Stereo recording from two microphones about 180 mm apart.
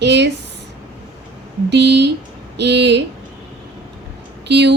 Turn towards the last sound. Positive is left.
turn(degrees=-70)  # may be behind; listen again after turning